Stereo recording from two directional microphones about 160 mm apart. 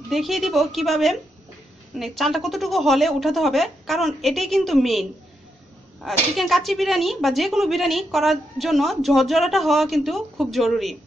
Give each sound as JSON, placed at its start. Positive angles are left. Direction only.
{"t": 0.1, "sound": "a woman's voice", "side_deg": 0}